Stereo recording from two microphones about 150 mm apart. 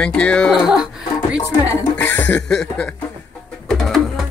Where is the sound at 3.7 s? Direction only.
Centre (ahead or behind).